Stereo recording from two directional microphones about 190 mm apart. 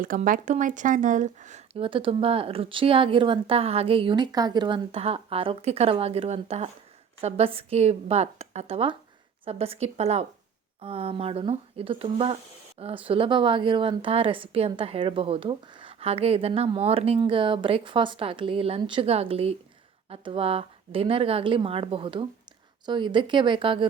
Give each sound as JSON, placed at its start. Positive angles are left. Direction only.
{"t": 0.0, "sound": "a woman's voice", "side_deg": -45}